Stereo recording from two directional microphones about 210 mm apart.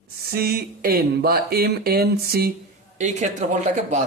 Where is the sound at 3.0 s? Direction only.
35° right (ahead or behind).